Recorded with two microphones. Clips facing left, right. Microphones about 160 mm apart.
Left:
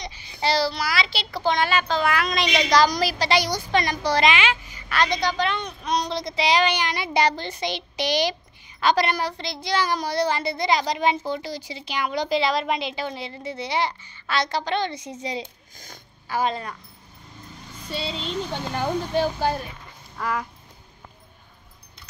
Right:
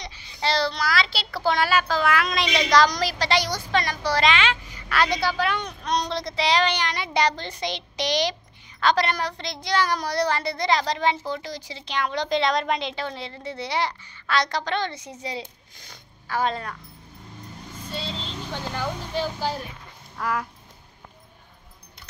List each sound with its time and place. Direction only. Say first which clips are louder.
0.0 s child singing: left 2 dB; 15° left (ahead or behind)
1.4 s a woman's voice: even; 5° right (ahead or behind)
5.0 s a woman's voice: left 1 dB; 5° right (ahead or behind)
5.7 s a woman's voice: left 1 dB; 5° left (ahead or behind)
10.0 s speech: left 1 dB; 25° left (ahead or behind)
10.7 s a woman's voice: left 1 dB; 10° left (ahead or behind)
14.7 s a woman's voice: left 2 dB; 15° left (ahead or behind)
18.8 s speech: left 6 dB; 60° left (ahead or behind)
20.2 s a sound: even; centre (ahead or behind)